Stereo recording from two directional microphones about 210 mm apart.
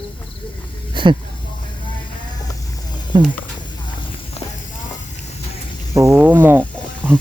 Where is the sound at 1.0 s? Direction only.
20° right (ahead or behind).